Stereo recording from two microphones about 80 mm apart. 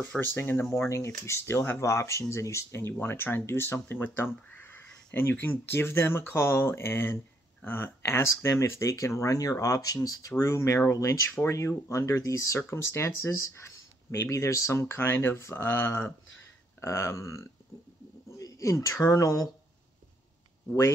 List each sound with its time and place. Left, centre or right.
0.2 s speech: left
0.7 s speech: left